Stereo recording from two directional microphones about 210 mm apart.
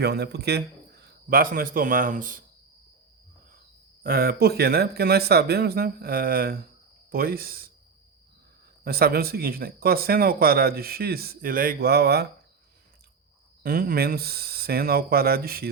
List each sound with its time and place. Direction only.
0.0 s a man's voice: 50° right (ahead or behind)
4.0 s speech: 45° right (ahead or behind)
8.8 s speech: 45° right (ahead or behind)
13.6 s speech: 45° right (ahead or behind)